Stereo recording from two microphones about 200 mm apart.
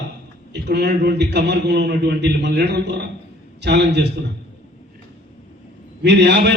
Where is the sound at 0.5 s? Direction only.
55° right (ahead or behind).